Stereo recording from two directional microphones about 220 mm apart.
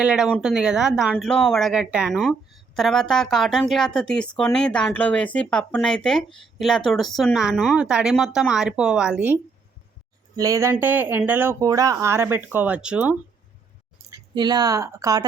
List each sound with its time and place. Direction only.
0.0 s speech: 5° right (ahead or behind)
14.1 s speech: 20° right (ahead or behind)